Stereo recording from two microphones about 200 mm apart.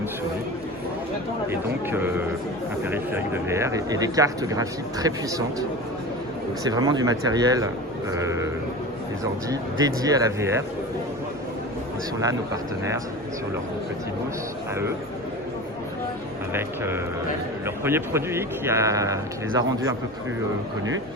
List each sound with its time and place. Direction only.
1.5 s speech: 10° right (ahead or behind)
6.7 s speech: 20° right (ahead or behind)
9.5 s speech: 20° right (ahead or behind)
16.5 s speech: 10° right (ahead or behind)